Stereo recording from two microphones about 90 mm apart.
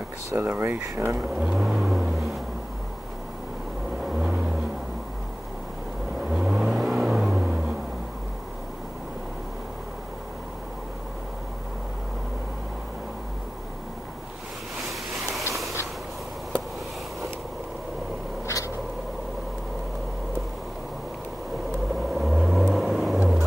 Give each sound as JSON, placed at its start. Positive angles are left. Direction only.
{"t": 0.4, "sound": "speech", "side_deg": -20}
{"t": 1.3, "sound": "vehicle", "side_deg": 0}
{"t": 4.0, "sound": "vehicle", "side_deg": -5}
{"t": 6.2, "sound": "car", "side_deg": -5}
{"t": 14.9, "sound": "a sound", "side_deg": 0}
{"t": 22.1, "sound": "vehicle", "side_deg": 0}